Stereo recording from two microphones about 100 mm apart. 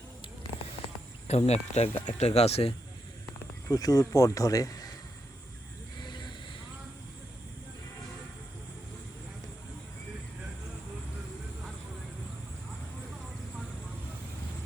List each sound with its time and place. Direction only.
1.3 s speech: 90° left
3.7 s speech: 40° left (ahead or behind)
6.0 s vehicle: 50° left (ahead or behind)